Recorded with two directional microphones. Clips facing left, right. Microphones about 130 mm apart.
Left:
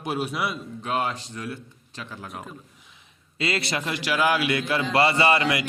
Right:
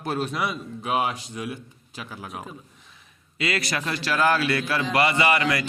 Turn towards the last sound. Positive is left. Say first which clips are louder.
# left 1 dB
turn(degrees=25)  # may be behind; listen again after turning